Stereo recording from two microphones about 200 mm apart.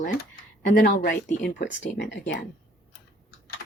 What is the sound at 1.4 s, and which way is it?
Speech, 60° left (ahead or behind).